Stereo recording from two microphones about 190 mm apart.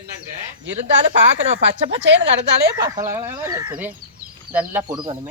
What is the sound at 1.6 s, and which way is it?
Speech, 75° right (ahead or behind).